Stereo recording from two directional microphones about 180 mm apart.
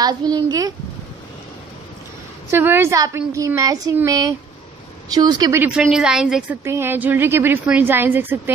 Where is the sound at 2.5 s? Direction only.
15° right (ahead or behind).